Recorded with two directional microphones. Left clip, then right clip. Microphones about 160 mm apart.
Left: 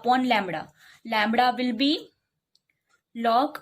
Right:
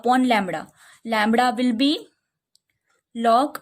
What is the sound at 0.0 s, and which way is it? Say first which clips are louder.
Speech: right 3 dB; 40° right (ahead or behind).